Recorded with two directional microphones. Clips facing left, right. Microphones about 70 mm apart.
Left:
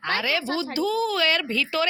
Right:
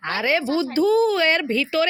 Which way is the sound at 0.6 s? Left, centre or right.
Right.